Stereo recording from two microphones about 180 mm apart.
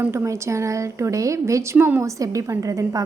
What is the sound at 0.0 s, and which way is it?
Speech, 15° right (ahead or behind).